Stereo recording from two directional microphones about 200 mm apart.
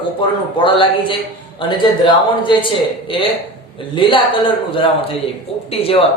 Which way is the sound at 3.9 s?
25° left (ahead or behind).